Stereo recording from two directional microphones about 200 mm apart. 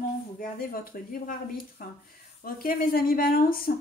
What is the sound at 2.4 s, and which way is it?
Speech, 45° left (ahead or behind).